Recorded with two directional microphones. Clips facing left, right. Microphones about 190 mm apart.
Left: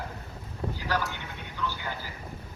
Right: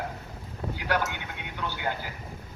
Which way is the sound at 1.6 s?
60° right (ahead or behind).